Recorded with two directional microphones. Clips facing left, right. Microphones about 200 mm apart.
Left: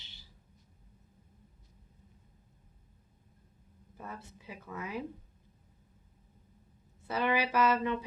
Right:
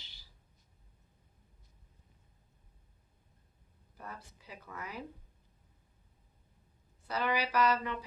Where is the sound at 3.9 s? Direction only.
20° left (ahead or behind).